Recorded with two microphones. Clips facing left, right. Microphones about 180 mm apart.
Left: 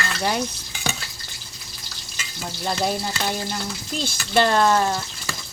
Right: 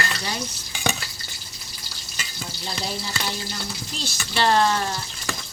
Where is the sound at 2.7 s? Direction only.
50° left (ahead or behind).